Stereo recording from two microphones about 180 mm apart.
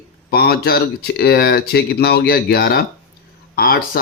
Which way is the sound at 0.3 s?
60° left (ahead or behind).